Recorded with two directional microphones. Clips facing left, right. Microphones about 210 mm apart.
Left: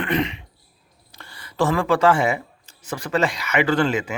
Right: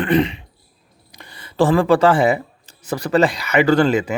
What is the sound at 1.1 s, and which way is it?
Speech, 15° right (ahead or behind).